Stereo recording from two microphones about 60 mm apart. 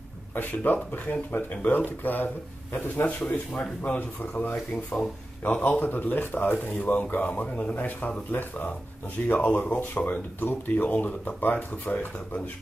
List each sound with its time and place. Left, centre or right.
0.3 s speech: left
9.3 s speech: left